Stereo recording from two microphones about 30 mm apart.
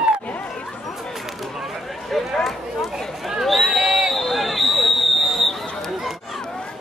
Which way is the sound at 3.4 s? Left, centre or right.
Centre.